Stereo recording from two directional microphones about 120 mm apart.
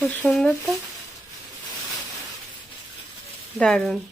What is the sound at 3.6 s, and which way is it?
Speech, 5° left (ahead or behind).